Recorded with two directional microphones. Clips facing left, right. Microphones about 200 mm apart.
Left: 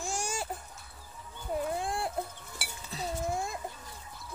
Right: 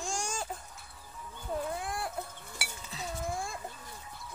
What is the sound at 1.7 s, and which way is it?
Chicken, 25° left (ahead or behind).